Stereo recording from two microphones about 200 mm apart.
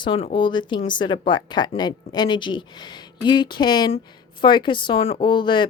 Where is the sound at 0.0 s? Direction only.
25° left (ahead or behind).